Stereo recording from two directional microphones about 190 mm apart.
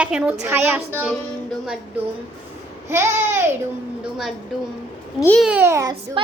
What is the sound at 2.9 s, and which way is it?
Speech, 15° right (ahead or behind).